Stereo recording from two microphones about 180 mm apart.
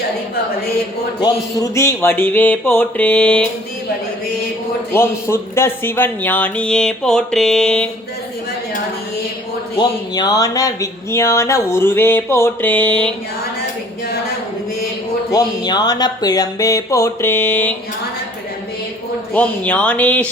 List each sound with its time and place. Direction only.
1.2 s speech: 20° left (ahead or behind)
4.9 s speech: 15° left (ahead or behind)
9.7 s speech: 20° left (ahead or behind)
15.3 s speech: 20° left (ahead or behind)
19.3 s speech: 5° left (ahead or behind)